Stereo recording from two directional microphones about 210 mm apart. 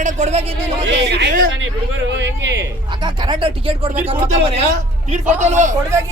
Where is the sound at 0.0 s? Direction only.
35° right (ahead or behind).